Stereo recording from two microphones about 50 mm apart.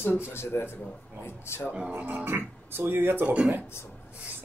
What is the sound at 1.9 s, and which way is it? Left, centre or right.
Speech, right.